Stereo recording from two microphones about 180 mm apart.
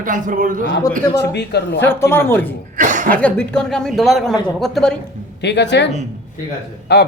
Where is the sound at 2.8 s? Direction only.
45° right (ahead or behind).